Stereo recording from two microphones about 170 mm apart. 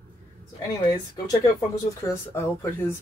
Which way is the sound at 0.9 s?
20° left (ahead or behind).